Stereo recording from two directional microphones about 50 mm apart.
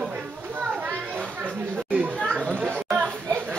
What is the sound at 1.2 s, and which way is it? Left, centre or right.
Chatter, right.